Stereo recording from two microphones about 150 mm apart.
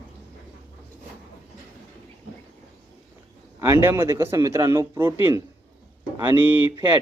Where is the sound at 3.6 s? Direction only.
15° right (ahead or behind).